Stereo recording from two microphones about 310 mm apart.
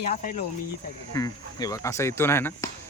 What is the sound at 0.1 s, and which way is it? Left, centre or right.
Speech, left.